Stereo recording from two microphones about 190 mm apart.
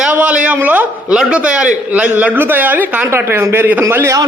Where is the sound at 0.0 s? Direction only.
5° right (ahead or behind).